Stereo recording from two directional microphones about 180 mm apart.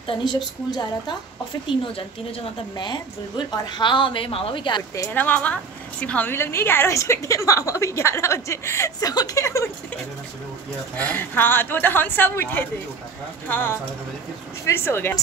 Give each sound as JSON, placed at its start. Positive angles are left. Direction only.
{"t": 0.0, "sound": "a woman's voice", "side_deg": 25}
{"t": 11.0, "sound": "a woman's voice", "side_deg": 10}